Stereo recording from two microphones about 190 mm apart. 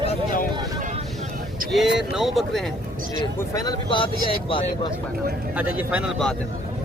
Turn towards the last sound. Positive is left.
turn(degrees=0)  # may be behind; listen again after turning